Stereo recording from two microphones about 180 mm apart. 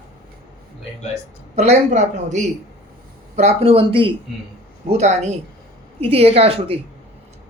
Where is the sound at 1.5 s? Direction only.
40° right (ahead or behind).